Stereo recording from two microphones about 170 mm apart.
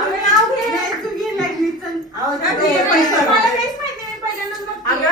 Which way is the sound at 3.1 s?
Centre (ahead or behind).